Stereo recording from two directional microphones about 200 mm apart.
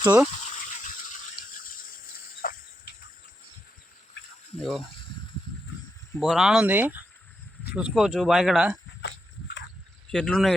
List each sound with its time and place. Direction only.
0.0 s speech: 10° right (ahead or behind)
0.5 s a sound: 40° left (ahead or behind)
6.1 s speech: centre (ahead or behind)
10.1 s speech: 5° left (ahead or behind)